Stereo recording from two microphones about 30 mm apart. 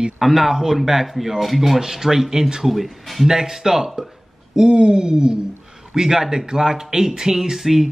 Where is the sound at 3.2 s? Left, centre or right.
Centre.